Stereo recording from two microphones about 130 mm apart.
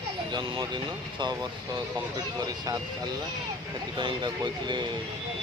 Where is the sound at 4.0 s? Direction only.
35° right (ahead or behind).